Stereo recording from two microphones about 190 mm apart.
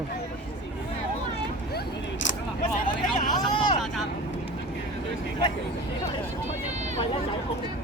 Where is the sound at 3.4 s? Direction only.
25° left (ahead or behind).